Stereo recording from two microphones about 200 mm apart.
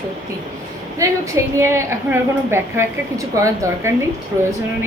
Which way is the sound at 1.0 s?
15° right (ahead or behind).